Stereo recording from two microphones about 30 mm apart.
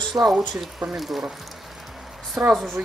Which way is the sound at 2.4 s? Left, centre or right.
Right.